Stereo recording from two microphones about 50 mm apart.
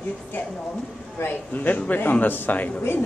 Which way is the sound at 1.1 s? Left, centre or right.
Left.